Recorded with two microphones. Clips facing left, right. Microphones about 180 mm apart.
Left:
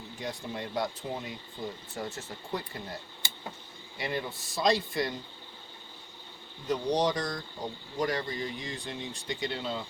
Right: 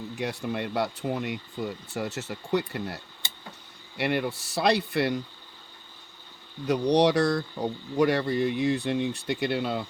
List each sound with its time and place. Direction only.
0.2 s speech: 70° right (ahead or behind)
6.7 s speech: 70° right (ahead or behind)